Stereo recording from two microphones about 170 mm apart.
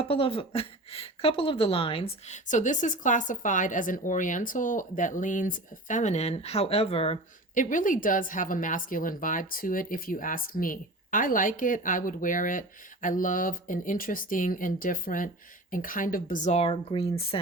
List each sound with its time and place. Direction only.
0.0 s speech: 35° left (ahead or behind)